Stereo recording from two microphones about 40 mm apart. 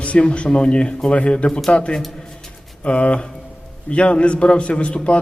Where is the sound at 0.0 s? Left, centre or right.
Left.